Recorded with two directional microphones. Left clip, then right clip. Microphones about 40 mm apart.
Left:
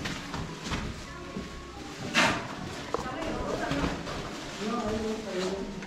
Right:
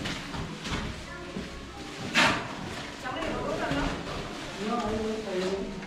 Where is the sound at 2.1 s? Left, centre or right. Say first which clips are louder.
Right 2 dB; centre.